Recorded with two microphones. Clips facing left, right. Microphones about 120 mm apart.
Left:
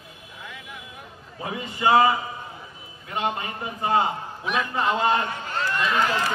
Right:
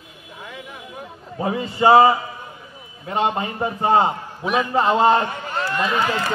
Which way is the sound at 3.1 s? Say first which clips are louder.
Right 6 dB; 30° right (ahead or behind).